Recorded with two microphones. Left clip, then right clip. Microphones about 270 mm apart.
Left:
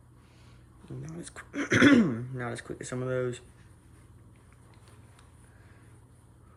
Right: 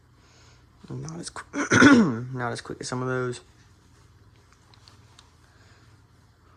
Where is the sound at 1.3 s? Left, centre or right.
Centre.